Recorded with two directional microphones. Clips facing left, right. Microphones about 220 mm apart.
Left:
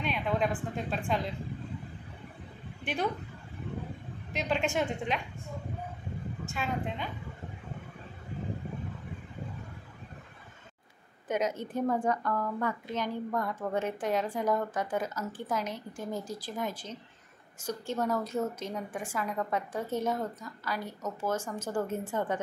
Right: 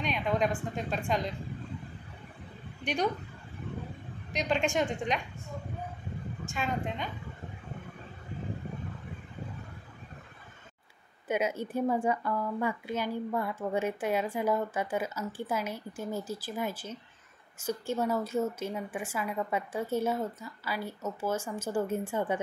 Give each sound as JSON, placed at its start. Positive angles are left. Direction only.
{"t": 0.0, "sound": "a woman's voice", "side_deg": 5}
{"t": 2.8, "sound": "a woman's voice", "side_deg": 5}
{"t": 4.3, "sound": "a woman's voice", "side_deg": 5}
{"t": 6.4, "sound": "a woman's voice", "side_deg": 5}
{"t": 11.2, "sound": "a woman's voice", "side_deg": -10}